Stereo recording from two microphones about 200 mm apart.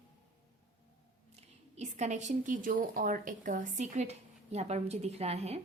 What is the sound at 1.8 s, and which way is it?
Speech, 35° right (ahead or behind).